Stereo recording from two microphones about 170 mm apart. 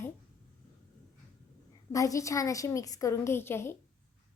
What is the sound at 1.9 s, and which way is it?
A woman's voice, 20° left (ahead or behind).